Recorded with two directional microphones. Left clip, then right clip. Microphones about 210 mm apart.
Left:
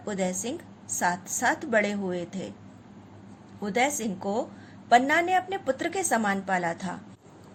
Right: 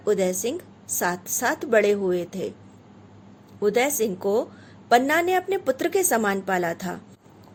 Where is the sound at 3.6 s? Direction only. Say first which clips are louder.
Right 5 dB; 55° right (ahead or behind).